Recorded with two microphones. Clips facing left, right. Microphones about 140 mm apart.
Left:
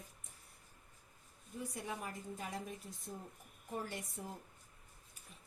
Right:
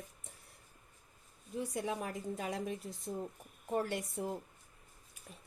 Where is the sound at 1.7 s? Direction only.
90° right.